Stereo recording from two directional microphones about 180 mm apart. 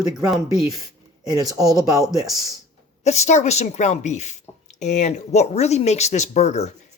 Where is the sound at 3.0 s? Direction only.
40° left (ahead or behind).